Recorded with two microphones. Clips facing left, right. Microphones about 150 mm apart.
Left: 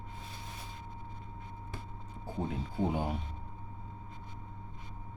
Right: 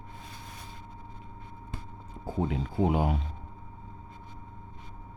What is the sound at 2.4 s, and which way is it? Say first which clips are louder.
Speech: right 6 dB; 90° right.